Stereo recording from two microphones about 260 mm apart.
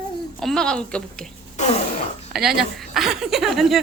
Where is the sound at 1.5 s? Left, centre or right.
Left.